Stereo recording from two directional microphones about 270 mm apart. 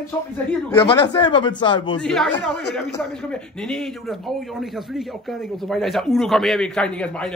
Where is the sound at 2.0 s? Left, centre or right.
Centre.